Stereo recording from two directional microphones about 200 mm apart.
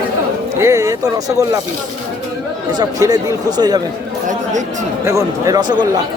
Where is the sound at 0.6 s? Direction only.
15° right (ahead or behind).